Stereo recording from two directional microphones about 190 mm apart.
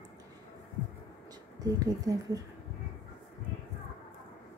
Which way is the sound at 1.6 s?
20° right (ahead or behind).